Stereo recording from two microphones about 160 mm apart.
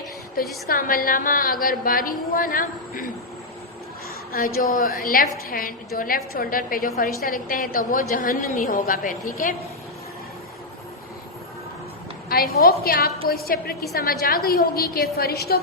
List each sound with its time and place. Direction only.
0.4 s a woman's voice: 60° left (ahead or behind)
4.3 s a woman's voice: 65° left (ahead or behind)
12.3 s a woman's voice: 70° left (ahead or behind)